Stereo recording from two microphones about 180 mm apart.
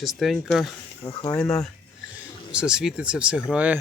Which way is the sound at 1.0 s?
25° left (ahead or behind).